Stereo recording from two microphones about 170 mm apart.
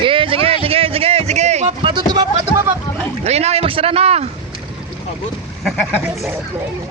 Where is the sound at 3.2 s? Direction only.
40° right (ahead or behind).